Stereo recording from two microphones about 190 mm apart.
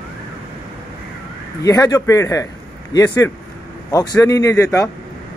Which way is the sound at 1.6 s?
20° left (ahead or behind).